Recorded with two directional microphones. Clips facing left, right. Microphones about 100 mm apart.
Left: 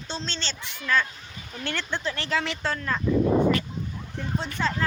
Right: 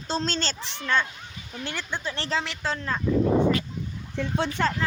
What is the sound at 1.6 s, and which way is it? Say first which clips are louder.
Speech: left 2 dB; 15° right (ahead or behind).